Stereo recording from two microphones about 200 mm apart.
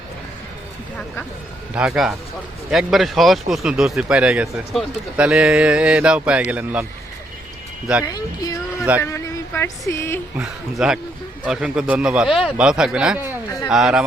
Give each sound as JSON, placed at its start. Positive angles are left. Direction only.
{"t": 1.7, "sound": "speech", "side_deg": -5}
{"t": 8.0, "sound": "speech", "side_deg": 20}
{"t": 10.3, "sound": "speech", "side_deg": -5}